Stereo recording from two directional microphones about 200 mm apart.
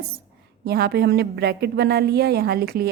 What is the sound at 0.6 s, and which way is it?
A woman's voice, 55° right (ahead or behind).